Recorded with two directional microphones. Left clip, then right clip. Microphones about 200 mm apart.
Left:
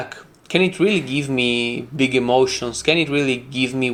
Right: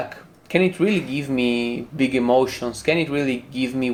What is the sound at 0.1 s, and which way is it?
Speech, 25° left (ahead or behind).